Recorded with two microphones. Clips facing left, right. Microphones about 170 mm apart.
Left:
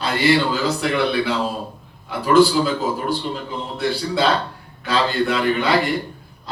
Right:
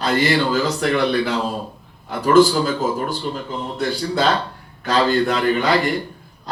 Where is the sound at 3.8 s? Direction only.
45° right (ahead or behind).